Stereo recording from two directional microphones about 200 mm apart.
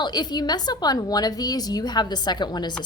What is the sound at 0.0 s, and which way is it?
A woman's voice, 20° left (ahead or behind).